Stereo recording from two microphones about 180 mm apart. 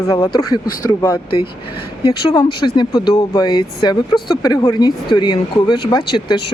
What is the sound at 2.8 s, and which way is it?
Speech, 25° left (ahead or behind).